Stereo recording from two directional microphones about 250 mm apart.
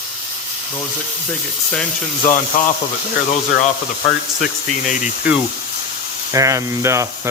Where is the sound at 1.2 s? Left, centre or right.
Centre.